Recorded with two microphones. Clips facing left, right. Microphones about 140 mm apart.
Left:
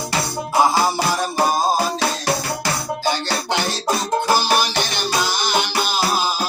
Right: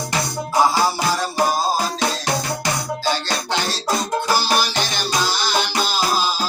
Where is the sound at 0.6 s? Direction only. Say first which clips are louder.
Left 1 dB; 20° left (ahead or behind).